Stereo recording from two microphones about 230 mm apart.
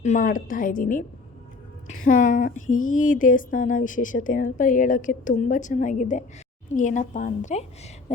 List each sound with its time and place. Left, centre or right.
0.0 s a woman's voice: left